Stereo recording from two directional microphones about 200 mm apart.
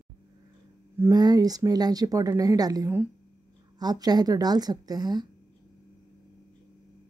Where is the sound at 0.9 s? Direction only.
15° right (ahead or behind).